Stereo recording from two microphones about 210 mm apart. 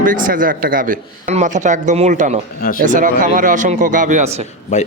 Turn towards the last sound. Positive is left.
turn(degrees=35)  # may be behind; listen again after turning